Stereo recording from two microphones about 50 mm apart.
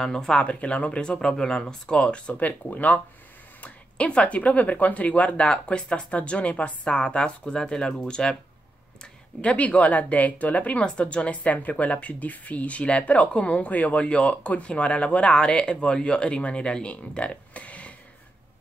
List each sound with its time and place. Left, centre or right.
0.0 s speech: centre; by 3.0 s left
4.1 s speech: left
9.4 s speech: left